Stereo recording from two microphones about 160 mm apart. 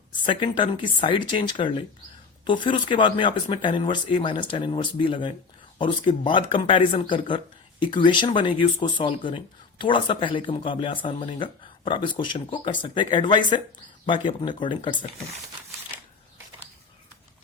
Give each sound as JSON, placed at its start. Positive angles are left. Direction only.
{"t": 0.3, "sound": "speech", "side_deg": 30}